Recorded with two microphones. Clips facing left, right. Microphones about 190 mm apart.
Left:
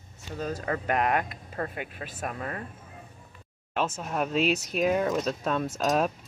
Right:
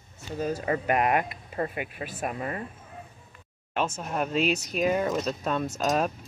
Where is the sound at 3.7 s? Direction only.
Centre (ahead or behind).